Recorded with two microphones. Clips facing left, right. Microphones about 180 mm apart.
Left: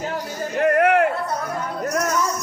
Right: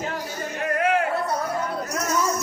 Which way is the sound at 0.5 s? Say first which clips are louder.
Left 6 dB; 60° left (ahead or behind).